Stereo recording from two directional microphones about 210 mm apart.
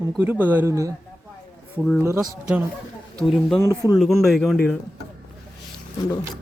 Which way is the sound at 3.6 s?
15° left (ahead or behind).